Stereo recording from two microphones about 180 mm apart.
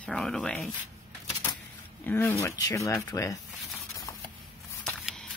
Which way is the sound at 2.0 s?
10° left (ahead or behind).